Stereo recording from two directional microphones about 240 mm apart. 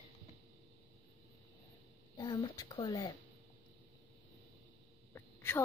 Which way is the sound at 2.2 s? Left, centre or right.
Centre.